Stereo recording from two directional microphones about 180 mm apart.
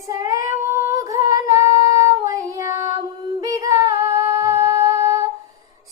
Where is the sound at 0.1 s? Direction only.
20° right (ahead or behind).